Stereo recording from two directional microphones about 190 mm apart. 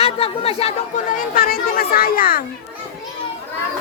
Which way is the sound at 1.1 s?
50° left (ahead or behind).